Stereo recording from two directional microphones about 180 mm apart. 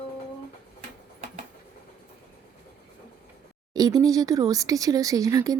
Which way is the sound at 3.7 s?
20° right (ahead or behind).